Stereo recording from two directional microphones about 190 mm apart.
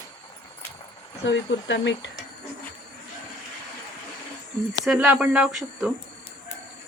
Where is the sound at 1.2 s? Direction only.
70° left (ahead or behind).